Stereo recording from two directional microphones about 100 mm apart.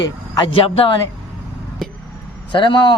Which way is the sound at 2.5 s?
55° left (ahead or behind).